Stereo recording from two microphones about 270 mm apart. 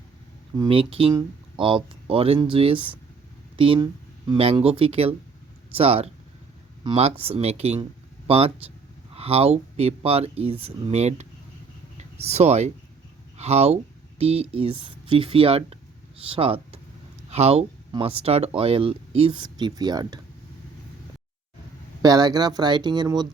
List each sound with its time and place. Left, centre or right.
0.5 s speech: centre
22.0 s speech: centre